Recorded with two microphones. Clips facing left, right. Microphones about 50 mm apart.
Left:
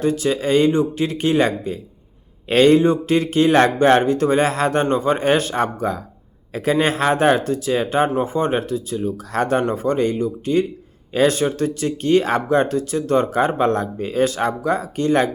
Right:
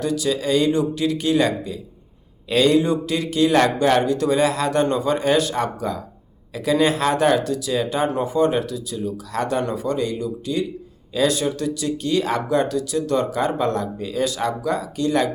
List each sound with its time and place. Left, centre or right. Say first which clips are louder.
0.0 s speech: left 3 dB; left